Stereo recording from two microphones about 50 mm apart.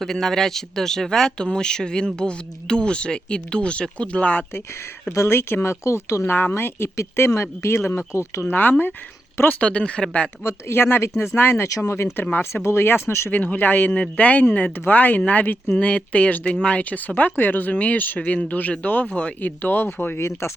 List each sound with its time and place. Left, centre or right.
0.0 s speech: centre; by 4.4 s left
5.1 s speech: left
5.8 s speech: left
6.2 s speech: left
8.4 s speech: left
9.5 s speech: left
10.8 s speech: left
11.8 s speech: left
12.1 s speech: left
12.6 s speech: left
13.3 s speech: left
15.8 s speech: left